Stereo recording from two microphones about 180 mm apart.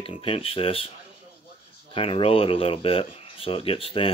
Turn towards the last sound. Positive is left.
turn(degrees=30)  # may be behind; listen again after turning